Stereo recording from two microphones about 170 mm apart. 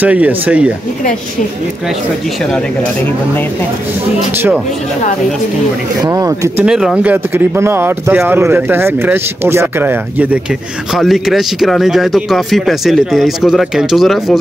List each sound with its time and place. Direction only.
0.0 s speech: 10° right (ahead or behind)
6.0 s speech: 20° right (ahead or behind)
6.6 s a man's voice: 5° right (ahead or behind)